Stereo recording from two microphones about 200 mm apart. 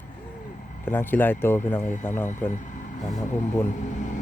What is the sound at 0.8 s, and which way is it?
Speech, 10° left (ahead or behind).